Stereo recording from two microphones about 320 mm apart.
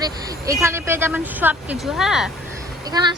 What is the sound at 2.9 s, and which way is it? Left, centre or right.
Speech, centre.